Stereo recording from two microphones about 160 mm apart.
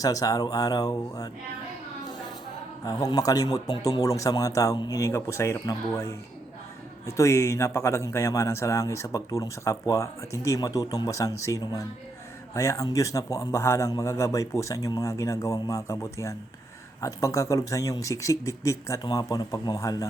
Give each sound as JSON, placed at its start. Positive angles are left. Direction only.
{"t": 0.0, "sound": "a man's voice", "side_deg": 20}
{"t": 2.8, "sound": "a man's voice", "side_deg": 20}